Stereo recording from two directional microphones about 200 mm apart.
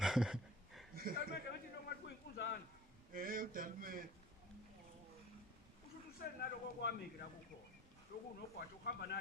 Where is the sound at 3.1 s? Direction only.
45° right (ahead or behind).